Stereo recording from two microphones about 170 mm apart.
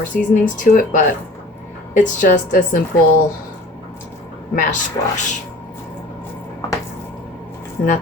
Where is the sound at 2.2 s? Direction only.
50° left (ahead or behind).